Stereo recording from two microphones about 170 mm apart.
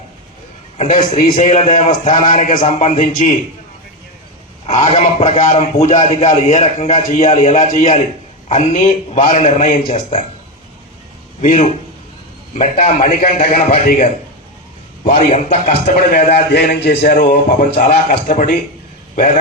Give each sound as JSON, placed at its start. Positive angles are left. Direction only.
{"t": 0.8, "sound": "a man's voice", "side_deg": 45}
{"t": 4.6, "sound": "a man's voice", "side_deg": 40}
{"t": 11.3, "sound": "a man's voice", "side_deg": 45}
{"t": 15.0, "sound": "a man's voice", "side_deg": 40}
{"t": 16.1, "sound": "a man's voice", "side_deg": 55}
{"t": 16.5, "sound": "a man's voice", "side_deg": 70}
{"t": 17.7, "sound": "a man's voice", "side_deg": 40}